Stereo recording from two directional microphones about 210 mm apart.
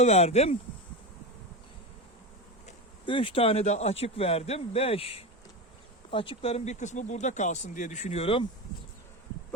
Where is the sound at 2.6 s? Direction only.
25° left (ahead or behind).